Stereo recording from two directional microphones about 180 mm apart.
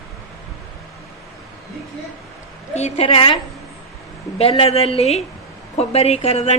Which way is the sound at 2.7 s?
35° left (ahead or behind).